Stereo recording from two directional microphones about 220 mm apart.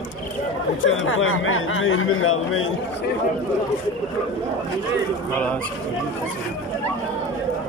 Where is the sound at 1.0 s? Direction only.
65° left (ahead or behind).